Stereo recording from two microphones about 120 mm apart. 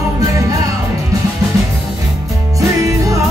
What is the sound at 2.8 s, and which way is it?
Music, 25° right (ahead or behind).